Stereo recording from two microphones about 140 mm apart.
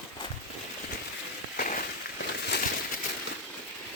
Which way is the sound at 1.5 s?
70° left (ahead or behind).